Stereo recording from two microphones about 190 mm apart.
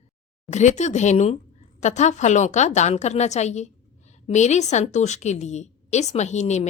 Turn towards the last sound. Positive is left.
turn(degrees=35)  # may be behind; listen again after turning